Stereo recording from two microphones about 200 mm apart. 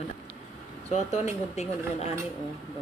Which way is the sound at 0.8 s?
35° left (ahead or behind).